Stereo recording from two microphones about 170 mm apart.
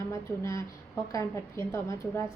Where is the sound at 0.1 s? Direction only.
15° left (ahead or behind).